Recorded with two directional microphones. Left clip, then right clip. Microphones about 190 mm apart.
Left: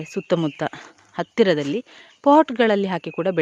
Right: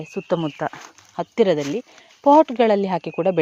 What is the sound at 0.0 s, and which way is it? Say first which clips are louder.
Speech: left 1 dB; 30° left (ahead or behind).